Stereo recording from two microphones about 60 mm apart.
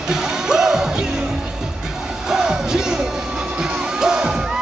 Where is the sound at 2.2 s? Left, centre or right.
Centre.